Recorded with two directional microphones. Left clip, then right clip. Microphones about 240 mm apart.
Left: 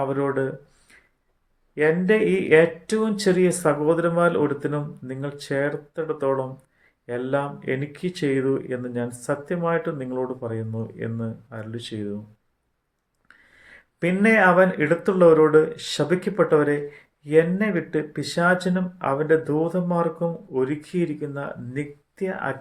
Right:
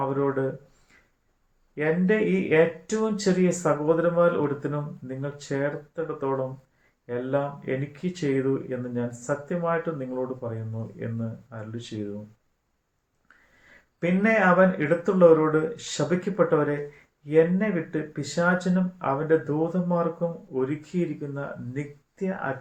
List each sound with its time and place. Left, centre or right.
0.1 s speech: left
1.7 s speech: left
14.0 s speech: left